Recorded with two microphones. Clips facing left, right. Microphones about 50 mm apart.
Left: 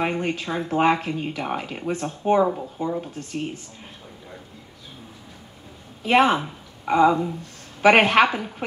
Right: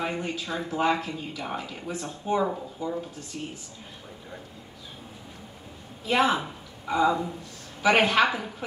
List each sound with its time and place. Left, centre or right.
0.0 s speech: left
6.0 s speech: left